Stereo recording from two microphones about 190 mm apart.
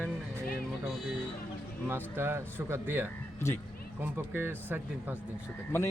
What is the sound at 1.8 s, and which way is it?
Speech, 10° right (ahead or behind).